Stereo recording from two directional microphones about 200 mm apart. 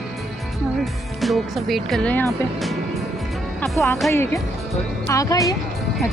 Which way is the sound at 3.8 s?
10° left (ahead or behind).